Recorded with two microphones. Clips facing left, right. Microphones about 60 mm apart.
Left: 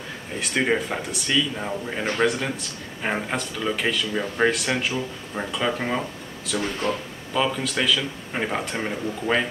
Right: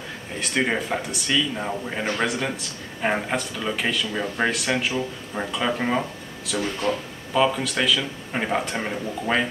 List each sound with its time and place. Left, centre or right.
0.4 s speech: centre
6.6 s speech: left
7.3 s speech: centre